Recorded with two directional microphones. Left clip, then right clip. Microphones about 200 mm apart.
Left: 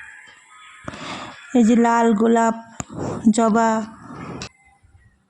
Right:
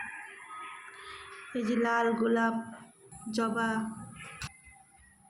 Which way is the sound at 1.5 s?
50° left (ahead or behind).